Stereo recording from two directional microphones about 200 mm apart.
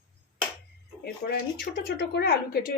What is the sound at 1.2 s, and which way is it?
Speech, 50° left (ahead or behind).